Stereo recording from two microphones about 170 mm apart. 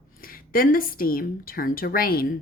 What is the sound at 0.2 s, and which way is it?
Speech, 60° left (ahead or behind).